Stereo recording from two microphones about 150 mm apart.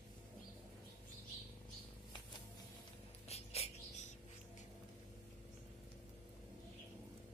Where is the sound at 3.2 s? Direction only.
45° left (ahead or behind).